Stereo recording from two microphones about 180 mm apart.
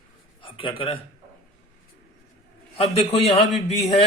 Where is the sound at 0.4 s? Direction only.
30° left (ahead or behind).